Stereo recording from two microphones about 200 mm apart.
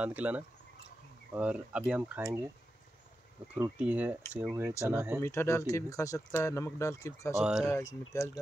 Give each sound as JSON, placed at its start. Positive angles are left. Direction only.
{"t": 0.0, "sound": "speech", "side_deg": -5}
{"t": 3.5, "sound": "speech", "side_deg": -10}
{"t": 5.2, "sound": "speech", "side_deg": 15}
{"t": 7.3, "sound": "speech", "side_deg": -5}
{"t": 7.6, "sound": "speech", "side_deg": 15}